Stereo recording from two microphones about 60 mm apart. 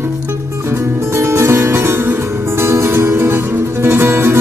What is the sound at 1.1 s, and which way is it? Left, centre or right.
Music, right.